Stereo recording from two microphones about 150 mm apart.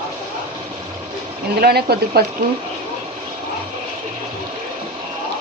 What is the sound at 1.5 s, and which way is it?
Speech, 90° right.